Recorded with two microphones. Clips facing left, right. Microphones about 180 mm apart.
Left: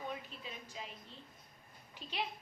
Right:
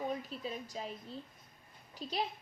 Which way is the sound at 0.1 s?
40° right (ahead or behind).